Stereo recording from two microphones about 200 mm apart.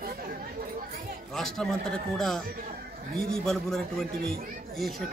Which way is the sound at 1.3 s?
Centre (ahead or behind).